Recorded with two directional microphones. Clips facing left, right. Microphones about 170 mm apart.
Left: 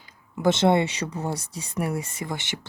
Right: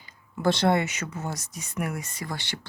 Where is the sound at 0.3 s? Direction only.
20° left (ahead or behind).